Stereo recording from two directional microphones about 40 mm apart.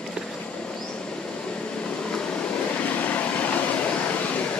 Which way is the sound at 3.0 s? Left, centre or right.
Left.